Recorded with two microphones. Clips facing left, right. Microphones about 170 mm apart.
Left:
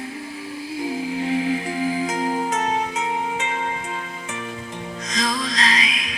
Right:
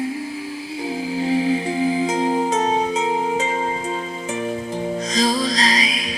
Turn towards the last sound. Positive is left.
turn(degrees=-35)  # may be behind; listen again after turning